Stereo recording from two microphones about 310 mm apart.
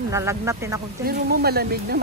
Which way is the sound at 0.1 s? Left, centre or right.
Centre.